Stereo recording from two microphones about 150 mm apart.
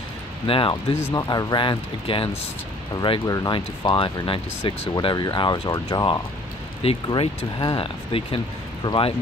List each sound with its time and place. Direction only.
0.5 s speech: 35° left (ahead or behind)
1.0 s speech: 25° left (ahead or behind)